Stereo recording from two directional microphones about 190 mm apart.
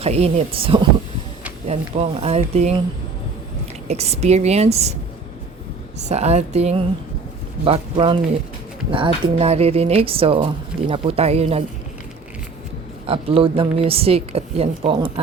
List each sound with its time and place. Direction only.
0.0 s a woman's voice: 35° right (ahead or behind)
3.8 s speech: 35° right (ahead or behind)
6.1 s a woman's voice: 35° right (ahead or behind)
13.1 s a woman's voice: 30° right (ahead or behind)